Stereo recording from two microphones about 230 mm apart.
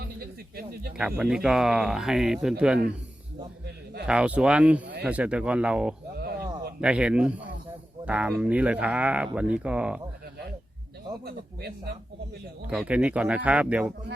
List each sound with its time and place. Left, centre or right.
0.2 s a sound: right
0.9 s speech: centre
4.0 s speech: centre
12.6 s speech: centre